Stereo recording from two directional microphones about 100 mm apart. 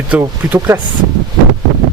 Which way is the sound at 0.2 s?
25° right (ahead or behind).